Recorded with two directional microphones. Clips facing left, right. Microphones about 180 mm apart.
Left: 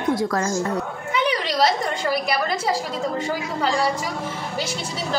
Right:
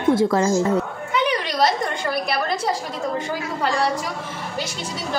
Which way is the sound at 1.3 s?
5° left (ahead or behind).